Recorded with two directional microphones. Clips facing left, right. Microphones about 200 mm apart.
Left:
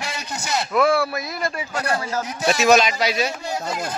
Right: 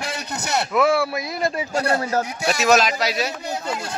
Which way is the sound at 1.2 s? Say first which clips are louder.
Right 3 dB; 25° right (ahead or behind).